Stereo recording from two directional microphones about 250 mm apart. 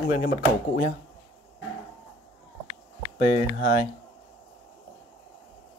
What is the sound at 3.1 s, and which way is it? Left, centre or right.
Speech, left.